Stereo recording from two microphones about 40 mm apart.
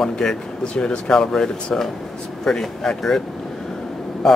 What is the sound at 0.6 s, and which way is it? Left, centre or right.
A man's voice, left.